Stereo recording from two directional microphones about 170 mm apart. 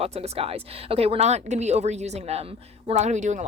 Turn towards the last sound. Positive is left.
turn(degrees=-45)  # may be behind; listen again after turning